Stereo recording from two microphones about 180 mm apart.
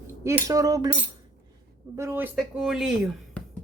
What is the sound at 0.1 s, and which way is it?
Speech, 15° right (ahead or behind).